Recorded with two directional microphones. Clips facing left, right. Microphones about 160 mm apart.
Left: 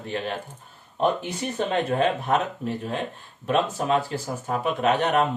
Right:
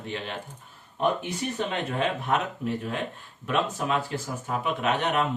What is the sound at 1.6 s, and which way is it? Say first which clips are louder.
Speech: left 7 dB; 40° left (ahead or behind).